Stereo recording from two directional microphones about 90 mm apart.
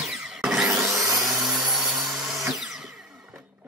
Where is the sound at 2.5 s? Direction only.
5° right (ahead or behind).